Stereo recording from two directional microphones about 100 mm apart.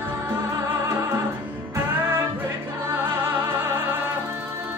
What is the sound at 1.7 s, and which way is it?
Music, 25° right (ahead or behind).